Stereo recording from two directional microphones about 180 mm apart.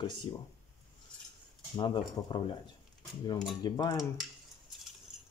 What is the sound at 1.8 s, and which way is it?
Speech, 25° left (ahead or behind).